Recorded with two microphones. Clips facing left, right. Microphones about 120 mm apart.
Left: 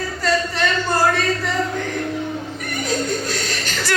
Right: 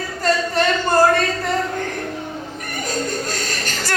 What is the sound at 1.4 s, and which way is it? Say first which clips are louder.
Music: right 1 dB; 50° right (ahead or behind).